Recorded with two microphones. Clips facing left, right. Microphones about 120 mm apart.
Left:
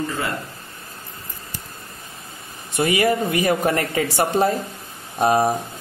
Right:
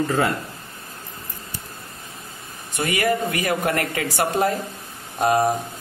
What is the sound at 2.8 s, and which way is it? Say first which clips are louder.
Speech: left 3 dB; 25° left (ahead or behind).